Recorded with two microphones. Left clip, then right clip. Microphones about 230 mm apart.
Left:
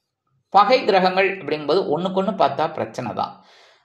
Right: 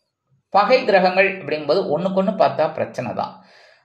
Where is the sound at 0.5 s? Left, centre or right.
Left.